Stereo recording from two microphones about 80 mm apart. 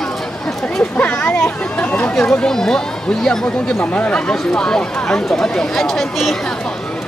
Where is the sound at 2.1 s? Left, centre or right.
Centre.